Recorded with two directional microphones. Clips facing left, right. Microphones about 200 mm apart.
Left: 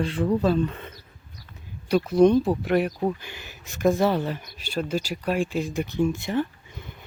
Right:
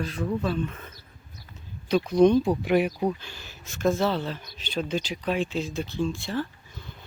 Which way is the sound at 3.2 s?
15° left (ahead or behind).